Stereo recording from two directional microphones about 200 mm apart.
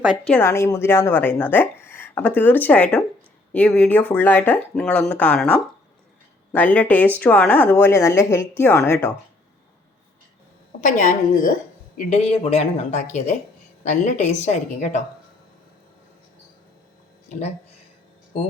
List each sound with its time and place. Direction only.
0.0 s speech: 5° right (ahead or behind)
0.3 s a woman's voice: 15° left (ahead or behind)
10.8 s a woman's voice: 40° left (ahead or behind)
12.5 s speech: 30° left (ahead or behind)